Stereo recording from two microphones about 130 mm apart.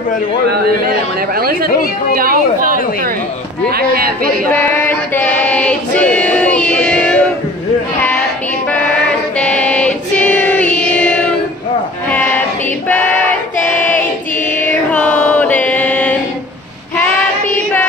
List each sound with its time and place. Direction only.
2.1 s a woman's voice: 90° right
4.5 s choir: 15° left (ahead or behind)
8.7 s choir: 10° left (ahead or behind)
12.8 s choir: 10° left (ahead or behind)
14.6 s music: 10° left (ahead or behind)